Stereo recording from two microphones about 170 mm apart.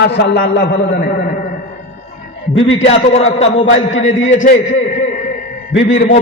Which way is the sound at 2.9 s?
35° left (ahead or behind).